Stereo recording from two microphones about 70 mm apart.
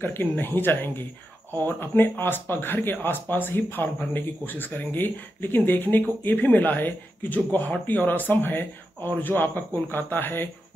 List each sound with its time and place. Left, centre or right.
0.0 s speech: left